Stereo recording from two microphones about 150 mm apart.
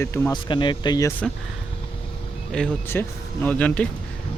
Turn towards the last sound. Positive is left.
turn(degrees=10)  # may be behind; listen again after turning